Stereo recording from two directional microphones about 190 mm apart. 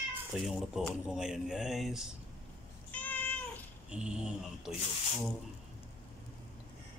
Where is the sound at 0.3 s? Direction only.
Centre (ahead or behind).